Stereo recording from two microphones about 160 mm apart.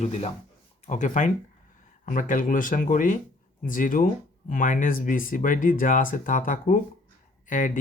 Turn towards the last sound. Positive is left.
turn(degrees=55)  # may be behind; listen again after turning